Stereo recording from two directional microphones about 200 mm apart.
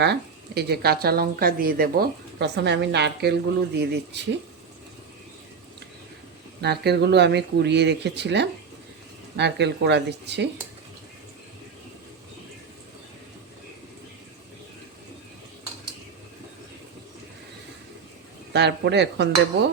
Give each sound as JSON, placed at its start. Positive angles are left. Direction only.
{"t": 0.0, "sound": "speech", "side_deg": -55}
{"t": 6.6, "sound": "speech", "side_deg": -55}
{"t": 18.5, "sound": "speech", "side_deg": -60}